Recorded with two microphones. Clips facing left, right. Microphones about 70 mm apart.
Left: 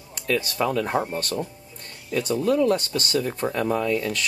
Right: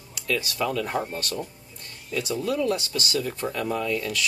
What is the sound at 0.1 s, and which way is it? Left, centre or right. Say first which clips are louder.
Speech: left 3 dB; left.